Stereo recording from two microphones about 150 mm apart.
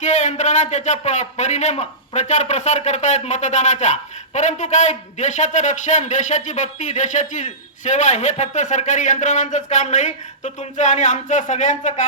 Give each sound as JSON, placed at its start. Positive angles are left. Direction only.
{"t": 0.0, "sound": "a man's voice", "side_deg": 50}